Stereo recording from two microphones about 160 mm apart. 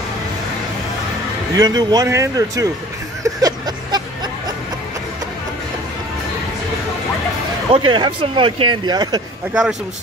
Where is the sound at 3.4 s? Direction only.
25° right (ahead or behind).